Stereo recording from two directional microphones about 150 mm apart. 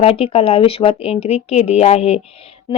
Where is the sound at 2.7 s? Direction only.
30° left (ahead or behind).